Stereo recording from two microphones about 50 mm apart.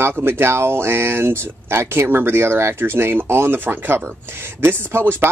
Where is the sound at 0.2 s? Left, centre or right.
Right.